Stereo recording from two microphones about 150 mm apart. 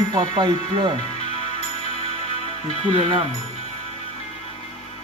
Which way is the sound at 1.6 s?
45° left (ahead or behind).